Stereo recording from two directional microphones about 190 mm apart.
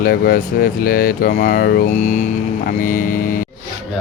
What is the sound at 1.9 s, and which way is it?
Mantra, 35° left (ahead or behind).